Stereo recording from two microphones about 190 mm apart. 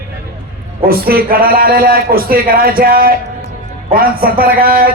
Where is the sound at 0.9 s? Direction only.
50° right (ahead or behind).